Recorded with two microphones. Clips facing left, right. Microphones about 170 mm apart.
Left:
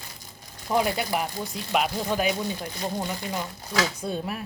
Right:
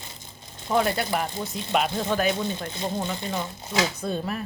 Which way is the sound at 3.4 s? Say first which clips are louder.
Right 1 dB; 20° right (ahead or behind).